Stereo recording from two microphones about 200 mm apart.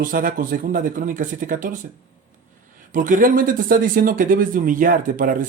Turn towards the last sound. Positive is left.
turn(degrees=-40)  # may be behind; listen again after turning